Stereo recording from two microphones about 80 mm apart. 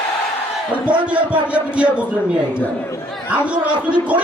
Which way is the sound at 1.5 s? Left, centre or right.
Centre.